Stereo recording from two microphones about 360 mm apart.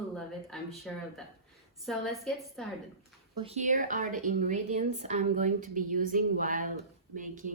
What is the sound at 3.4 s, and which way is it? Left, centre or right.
A woman's voice, right.